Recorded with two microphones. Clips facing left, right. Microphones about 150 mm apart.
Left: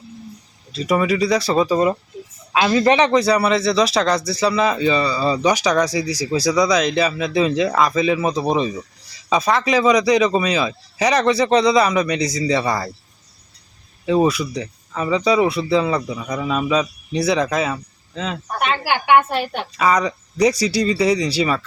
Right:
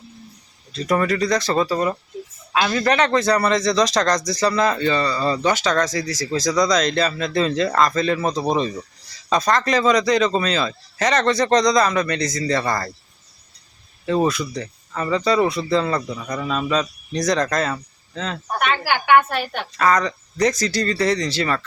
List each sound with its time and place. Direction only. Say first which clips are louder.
0.7 s a man's voice: left 2 dB; 5° left (ahead or behind)
14.0 s a man's voice: left 3 dB; 10° left (ahead or behind)
18.6 s a woman's voice: left 1 dB; 20° left (ahead or behind)
19.7 s a man's voice: left 1 dB; 10° left (ahead or behind)